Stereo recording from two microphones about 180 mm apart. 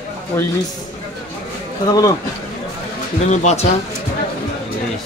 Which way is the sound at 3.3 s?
40° left (ahead or behind).